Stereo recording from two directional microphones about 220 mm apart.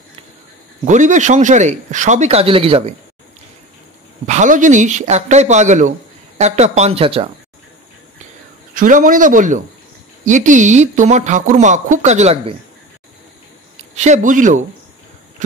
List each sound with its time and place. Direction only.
0.8 s speech: 35° right (ahead or behind)
4.3 s speech: 35° right (ahead or behind)
8.7 s speech: 35° right (ahead or behind)
13.9 s speech: 30° right (ahead or behind)